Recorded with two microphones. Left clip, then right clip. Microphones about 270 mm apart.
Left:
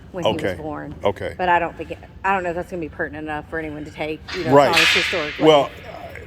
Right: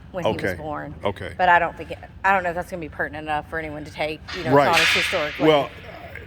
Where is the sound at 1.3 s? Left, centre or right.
Centre.